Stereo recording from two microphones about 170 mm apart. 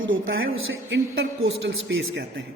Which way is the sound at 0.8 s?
90° right.